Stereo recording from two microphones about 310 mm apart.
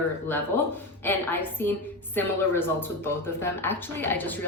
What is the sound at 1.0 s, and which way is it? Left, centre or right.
Speech, centre.